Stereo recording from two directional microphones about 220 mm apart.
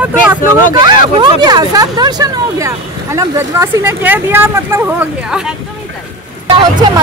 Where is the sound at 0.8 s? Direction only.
20° right (ahead or behind).